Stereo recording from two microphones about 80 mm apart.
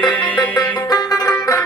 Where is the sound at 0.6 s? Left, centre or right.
Left.